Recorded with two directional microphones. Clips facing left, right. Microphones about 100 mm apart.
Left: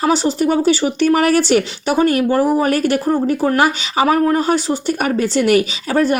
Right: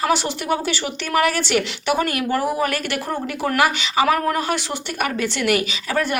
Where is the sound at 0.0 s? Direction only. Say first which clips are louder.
Left 6 dB; 35° left (ahead or behind).